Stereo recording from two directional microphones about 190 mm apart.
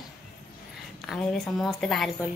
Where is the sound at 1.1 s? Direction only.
5° left (ahead or behind).